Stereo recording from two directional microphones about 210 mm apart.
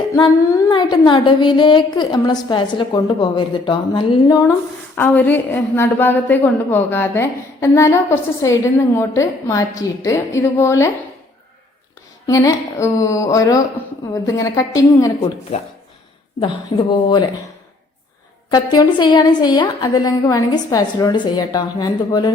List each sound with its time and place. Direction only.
0.2 s a woman's voice: 20° left (ahead or behind)
4.9 s a woman's voice: 10° left (ahead or behind)
12.2 s a woman's voice: 15° left (ahead or behind)
16.4 s a woman's voice: 25° left (ahead or behind)
18.5 s a woman's voice: 20° left (ahead or behind)